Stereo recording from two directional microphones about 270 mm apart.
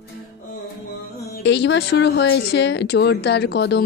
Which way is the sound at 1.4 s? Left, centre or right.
Left.